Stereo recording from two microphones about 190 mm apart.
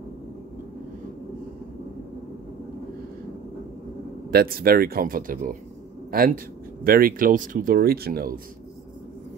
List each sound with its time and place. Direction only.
4.3 s speech: 50° right (ahead or behind)